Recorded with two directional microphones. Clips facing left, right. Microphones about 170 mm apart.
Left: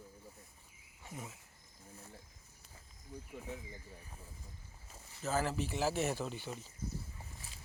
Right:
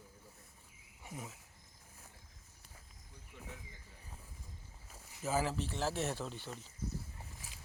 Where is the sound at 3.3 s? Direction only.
35° left (ahead or behind).